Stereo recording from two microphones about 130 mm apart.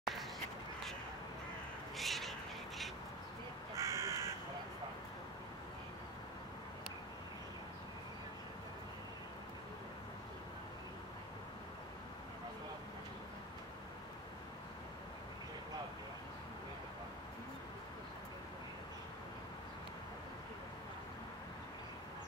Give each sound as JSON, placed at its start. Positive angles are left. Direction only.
{"t": 0.0, "sound": "a sound", "side_deg": 0}
{"t": 2.0, "sound": "cat", "side_deg": 0}
{"t": 3.7, "sound": "crow", "side_deg": -25}